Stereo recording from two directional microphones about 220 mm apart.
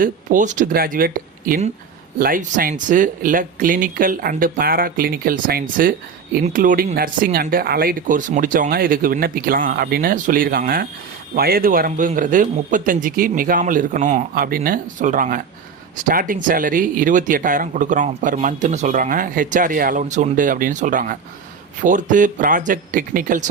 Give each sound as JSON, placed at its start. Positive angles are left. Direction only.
{"t": 0.0, "sound": "speech", "side_deg": -35}